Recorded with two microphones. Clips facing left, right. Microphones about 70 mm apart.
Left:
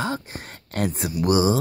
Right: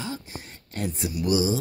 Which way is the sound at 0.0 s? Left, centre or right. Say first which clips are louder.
Left 7 dB; left.